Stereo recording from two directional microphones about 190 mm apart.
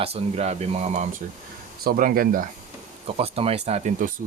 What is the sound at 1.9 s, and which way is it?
Speech, 50° right (ahead or behind).